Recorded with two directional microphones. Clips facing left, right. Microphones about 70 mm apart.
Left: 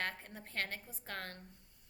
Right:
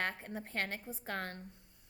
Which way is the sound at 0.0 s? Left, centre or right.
Right.